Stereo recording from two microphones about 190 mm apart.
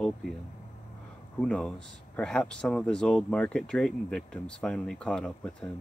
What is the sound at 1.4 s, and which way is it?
Speech, 5° left (ahead or behind).